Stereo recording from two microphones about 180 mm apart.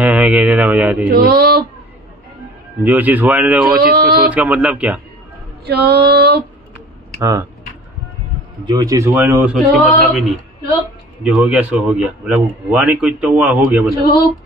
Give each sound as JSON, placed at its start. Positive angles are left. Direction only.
{"t": 0.0, "sound": "speech", "side_deg": -10}
{"t": 1.1, "sound": "a sound", "side_deg": -55}
{"t": 2.8, "sound": "a man's voice", "side_deg": -10}
{"t": 3.8, "sound": "a sound", "side_deg": -55}
{"t": 4.3, "sound": "a man's voice", "side_deg": -10}
{"t": 5.7, "sound": "a sound", "side_deg": -60}
{"t": 7.2, "sound": "speech", "side_deg": -15}
{"t": 8.6, "sound": "a man's voice", "side_deg": -20}
{"t": 11.2, "sound": "a man's voice", "side_deg": -5}